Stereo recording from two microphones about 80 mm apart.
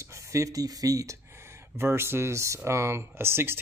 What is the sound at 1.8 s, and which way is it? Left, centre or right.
Speech, right.